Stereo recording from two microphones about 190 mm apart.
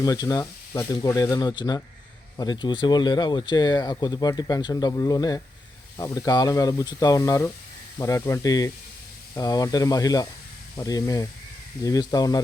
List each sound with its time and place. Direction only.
0.0 s speech: 20° left (ahead or behind)